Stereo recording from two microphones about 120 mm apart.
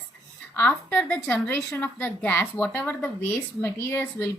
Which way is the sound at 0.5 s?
15° left (ahead or behind).